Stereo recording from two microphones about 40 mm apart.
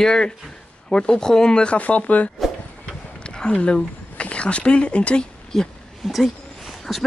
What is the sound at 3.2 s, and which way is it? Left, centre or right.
Speech, left.